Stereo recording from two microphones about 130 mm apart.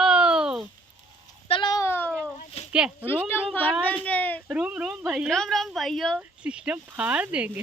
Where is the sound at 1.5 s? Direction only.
40° left (ahead or behind).